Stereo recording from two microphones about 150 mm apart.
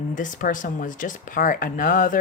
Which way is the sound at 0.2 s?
65° left (ahead or behind).